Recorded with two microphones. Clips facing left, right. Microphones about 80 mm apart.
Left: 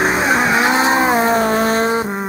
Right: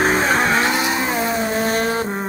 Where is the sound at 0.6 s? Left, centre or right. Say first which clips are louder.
Left 6 dB; left.